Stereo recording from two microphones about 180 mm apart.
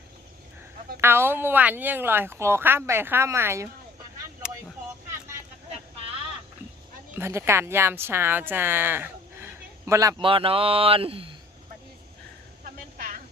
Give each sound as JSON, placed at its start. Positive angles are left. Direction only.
{"t": 1.0, "sound": "speech", "side_deg": -15}
{"t": 7.2, "sound": "a woman's voice", "side_deg": -15}
{"t": 12.6, "sound": "vehicle", "side_deg": -50}